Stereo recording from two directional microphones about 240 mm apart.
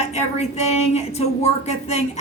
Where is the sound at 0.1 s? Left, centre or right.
Left.